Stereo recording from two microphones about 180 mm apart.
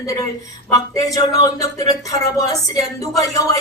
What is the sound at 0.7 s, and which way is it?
Speech, 20° left (ahead or behind).